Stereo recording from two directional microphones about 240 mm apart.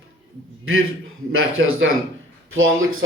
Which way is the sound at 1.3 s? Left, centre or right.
Right.